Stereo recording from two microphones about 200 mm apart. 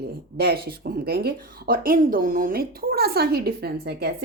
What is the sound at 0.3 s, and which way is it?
Speech, 50° right (ahead or behind).